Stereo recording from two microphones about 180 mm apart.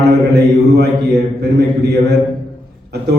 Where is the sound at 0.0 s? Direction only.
65° right (ahead or behind).